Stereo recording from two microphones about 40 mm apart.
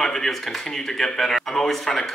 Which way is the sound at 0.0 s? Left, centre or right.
Centre.